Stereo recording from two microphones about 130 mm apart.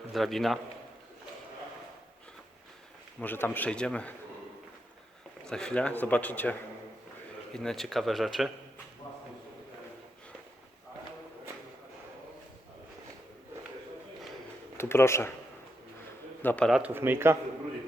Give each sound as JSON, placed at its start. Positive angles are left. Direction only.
{"t": 0.1, "sound": "speech", "side_deg": 0}
{"t": 3.2, "sound": "speech", "side_deg": 15}
{"t": 5.5, "sound": "speech", "side_deg": 5}
{"t": 14.8, "sound": "speech", "side_deg": 20}
{"t": 16.4, "sound": "speech", "side_deg": 15}
{"t": 16.8, "sound": "speech", "side_deg": -15}